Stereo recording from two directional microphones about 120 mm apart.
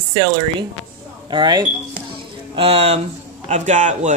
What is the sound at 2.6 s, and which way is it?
Speech, 55° right (ahead or behind).